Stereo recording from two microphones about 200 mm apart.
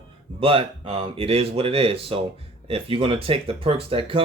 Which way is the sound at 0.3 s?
25° right (ahead or behind).